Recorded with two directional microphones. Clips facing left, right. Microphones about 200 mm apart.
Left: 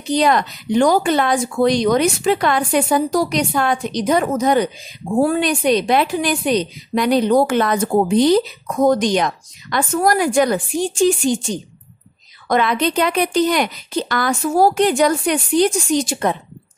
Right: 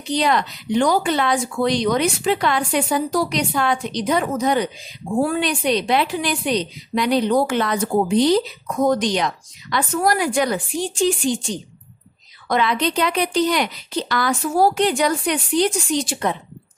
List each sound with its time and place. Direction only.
0.1 s speech: 45° left (ahead or behind)